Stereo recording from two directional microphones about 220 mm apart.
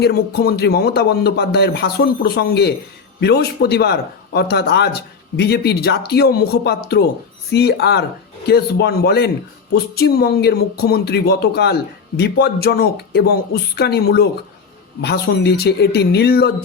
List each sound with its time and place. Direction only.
0.0 s speech: 45° left (ahead or behind)